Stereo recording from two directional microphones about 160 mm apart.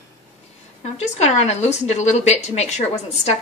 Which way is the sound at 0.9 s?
45° left (ahead or behind).